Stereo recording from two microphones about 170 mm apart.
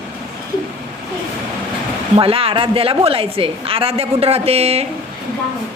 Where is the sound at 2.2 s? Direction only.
35° right (ahead or behind).